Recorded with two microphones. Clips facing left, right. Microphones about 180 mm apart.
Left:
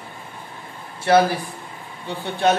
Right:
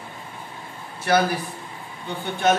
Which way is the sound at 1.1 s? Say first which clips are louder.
Left 4 dB; 25° left (ahead or behind).